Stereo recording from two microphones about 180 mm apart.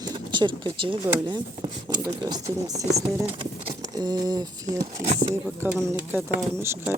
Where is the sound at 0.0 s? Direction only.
25° right (ahead or behind).